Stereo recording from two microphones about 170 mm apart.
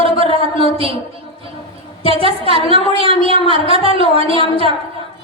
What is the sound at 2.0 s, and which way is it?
A woman's voice, 35° right (ahead or behind).